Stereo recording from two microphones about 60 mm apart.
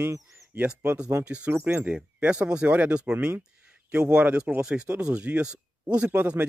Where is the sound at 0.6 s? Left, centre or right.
Centre.